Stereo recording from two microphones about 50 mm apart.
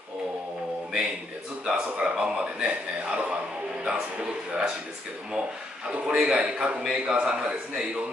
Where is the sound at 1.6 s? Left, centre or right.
Right.